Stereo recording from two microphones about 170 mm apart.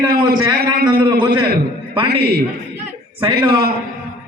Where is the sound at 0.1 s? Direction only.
65° right (ahead or behind).